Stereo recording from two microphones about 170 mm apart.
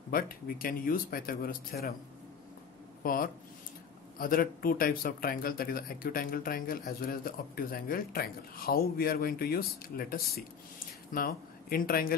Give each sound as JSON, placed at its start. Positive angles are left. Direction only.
{"t": 0.1, "sound": "speech", "side_deg": 60}
{"t": 3.0, "sound": "speech", "side_deg": 55}